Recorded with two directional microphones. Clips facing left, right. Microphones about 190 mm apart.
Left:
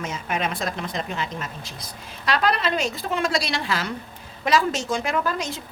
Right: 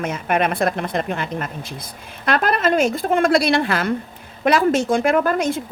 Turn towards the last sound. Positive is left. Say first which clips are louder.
# right 7 dB
turn(degrees=-55)  # may be behind; listen again after turning